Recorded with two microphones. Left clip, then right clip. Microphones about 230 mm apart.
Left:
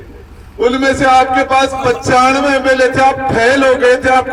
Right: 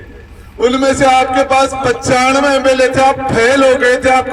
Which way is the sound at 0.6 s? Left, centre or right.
Right.